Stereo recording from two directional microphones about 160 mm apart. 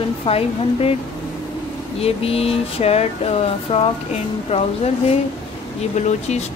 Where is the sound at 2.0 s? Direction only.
40° left (ahead or behind).